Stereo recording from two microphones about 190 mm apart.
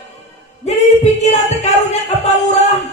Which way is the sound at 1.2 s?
35° left (ahead or behind).